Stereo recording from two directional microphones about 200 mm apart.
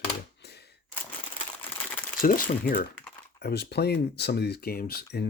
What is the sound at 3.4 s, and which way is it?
Speech, 55° left (ahead or behind).